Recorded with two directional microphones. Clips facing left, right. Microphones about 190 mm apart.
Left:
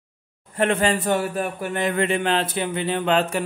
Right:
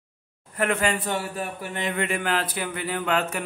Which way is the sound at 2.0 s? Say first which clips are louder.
Left 3 dB; 25° left (ahead or behind).